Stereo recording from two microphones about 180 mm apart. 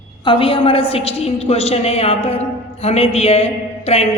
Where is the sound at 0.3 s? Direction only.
30° left (ahead or behind).